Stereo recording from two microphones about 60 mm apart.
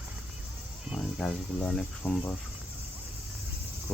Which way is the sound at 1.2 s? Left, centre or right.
Centre.